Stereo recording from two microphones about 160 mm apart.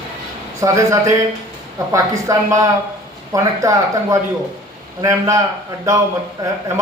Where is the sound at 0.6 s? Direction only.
20° right (ahead or behind).